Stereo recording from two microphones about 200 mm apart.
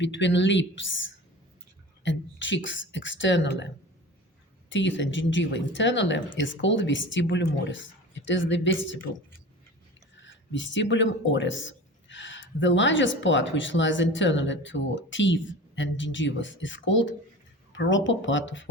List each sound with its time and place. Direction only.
0.0 s speech: 65° left (ahead or behind)
4.7 s speech: 65° left (ahead or behind)
10.2 s speech: 70° left (ahead or behind)